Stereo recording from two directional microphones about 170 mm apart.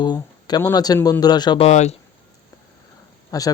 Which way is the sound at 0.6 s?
20° left (ahead or behind).